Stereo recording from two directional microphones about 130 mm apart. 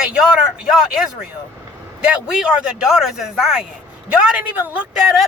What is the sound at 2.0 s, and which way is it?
Speech, 5° right (ahead or behind).